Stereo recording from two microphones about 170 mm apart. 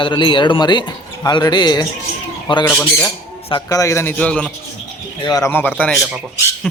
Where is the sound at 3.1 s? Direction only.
20° left (ahead or behind).